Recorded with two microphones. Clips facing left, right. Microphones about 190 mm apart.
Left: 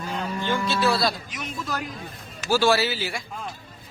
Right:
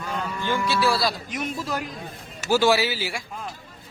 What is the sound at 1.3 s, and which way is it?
Speech, 50° right (ahead or behind).